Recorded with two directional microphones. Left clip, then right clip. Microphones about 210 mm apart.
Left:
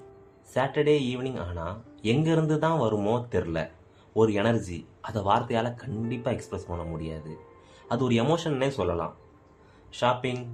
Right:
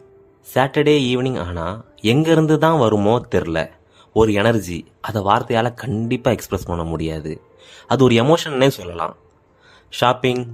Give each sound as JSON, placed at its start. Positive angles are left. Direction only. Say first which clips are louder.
{"t": 0.5, "sound": "speech", "louder": "right 8 dB", "side_deg": -50}